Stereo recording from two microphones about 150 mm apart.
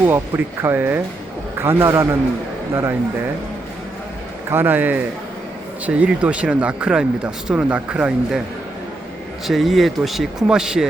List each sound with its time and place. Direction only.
0.0 s speech: 15° right (ahead or behind)
4.5 s speech: 15° right (ahead or behind)
9.5 s speech: centre (ahead or behind)